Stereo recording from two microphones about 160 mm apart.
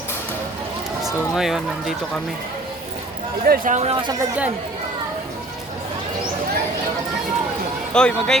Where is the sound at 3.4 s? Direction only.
65° right (ahead or behind).